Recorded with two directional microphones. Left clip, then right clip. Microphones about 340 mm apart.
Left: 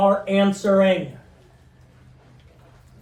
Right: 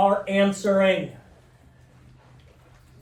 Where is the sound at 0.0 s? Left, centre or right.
Centre.